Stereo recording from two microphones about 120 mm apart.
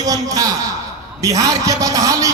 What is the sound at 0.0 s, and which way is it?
A man's voice, 30° right (ahead or behind).